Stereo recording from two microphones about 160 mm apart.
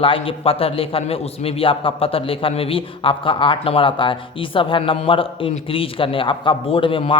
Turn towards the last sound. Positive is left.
turn(degrees=35)  # may be behind; listen again after turning